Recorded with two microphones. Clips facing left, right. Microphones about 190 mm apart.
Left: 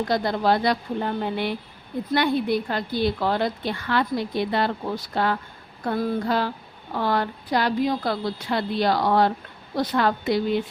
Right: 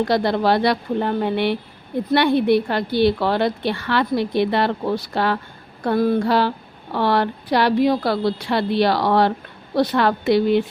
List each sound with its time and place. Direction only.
0.1 s a woman's voice: 75° right (ahead or behind)